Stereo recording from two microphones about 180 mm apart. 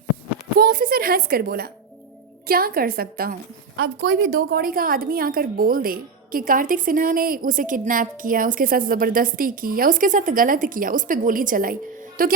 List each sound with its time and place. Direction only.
0.6 s a woman's voice: 55° right (ahead or behind)